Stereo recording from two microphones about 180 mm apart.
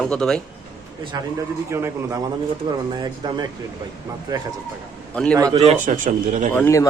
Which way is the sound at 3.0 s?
25° right (ahead or behind).